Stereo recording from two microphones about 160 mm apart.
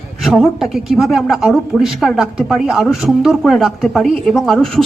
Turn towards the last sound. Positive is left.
turn(degrees=0)  # may be behind; listen again after turning